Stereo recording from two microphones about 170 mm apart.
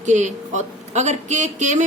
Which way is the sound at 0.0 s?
45° right (ahead or behind).